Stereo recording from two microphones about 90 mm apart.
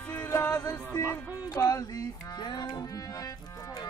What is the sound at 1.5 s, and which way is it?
Music, 35° left (ahead or behind).